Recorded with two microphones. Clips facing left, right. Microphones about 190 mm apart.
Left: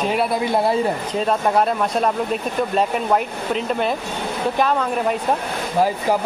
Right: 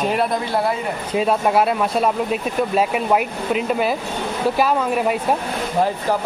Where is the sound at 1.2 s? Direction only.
5° right (ahead or behind).